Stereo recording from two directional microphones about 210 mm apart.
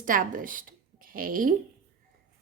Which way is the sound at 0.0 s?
40° right (ahead or behind).